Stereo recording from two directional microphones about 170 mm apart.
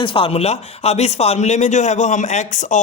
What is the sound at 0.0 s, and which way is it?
Speech, 30° left (ahead or behind).